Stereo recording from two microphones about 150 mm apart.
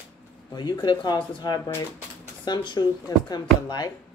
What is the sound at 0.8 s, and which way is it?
Speech, 30° left (ahead or behind).